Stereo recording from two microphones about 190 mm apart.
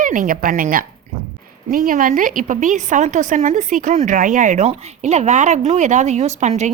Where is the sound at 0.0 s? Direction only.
45° right (ahead or behind).